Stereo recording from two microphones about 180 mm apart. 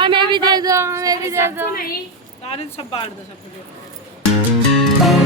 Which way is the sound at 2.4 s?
35° left (ahead or behind).